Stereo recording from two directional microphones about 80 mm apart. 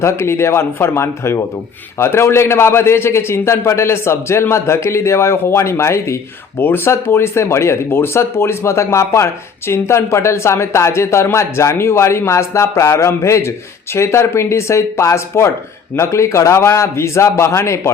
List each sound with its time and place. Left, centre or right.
0.0 s speech: left